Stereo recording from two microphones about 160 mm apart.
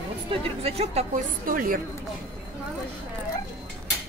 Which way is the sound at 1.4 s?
60° right (ahead or behind).